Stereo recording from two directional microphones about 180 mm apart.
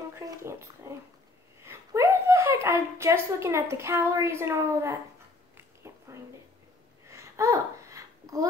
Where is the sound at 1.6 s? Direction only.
15° right (ahead or behind).